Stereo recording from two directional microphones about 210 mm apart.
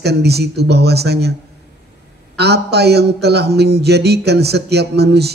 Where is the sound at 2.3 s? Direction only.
50° right (ahead or behind).